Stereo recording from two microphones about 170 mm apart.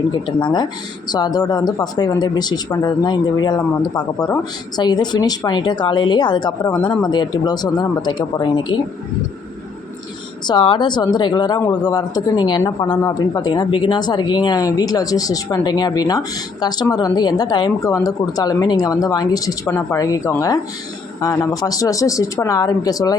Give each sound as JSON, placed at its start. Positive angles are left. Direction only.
{"t": 0.1, "sound": "speech", "side_deg": 25}
{"t": 10.4, "sound": "speech", "side_deg": 25}